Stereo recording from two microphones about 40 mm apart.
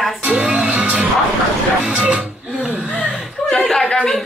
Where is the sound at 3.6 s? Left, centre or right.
Centre.